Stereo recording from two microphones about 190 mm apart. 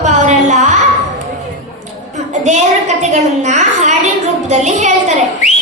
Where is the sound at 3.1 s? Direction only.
40° right (ahead or behind).